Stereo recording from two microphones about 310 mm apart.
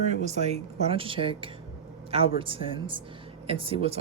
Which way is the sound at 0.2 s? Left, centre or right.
Right.